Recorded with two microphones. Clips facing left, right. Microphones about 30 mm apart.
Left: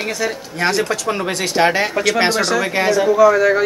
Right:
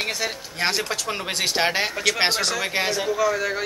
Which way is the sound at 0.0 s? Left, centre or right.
Right.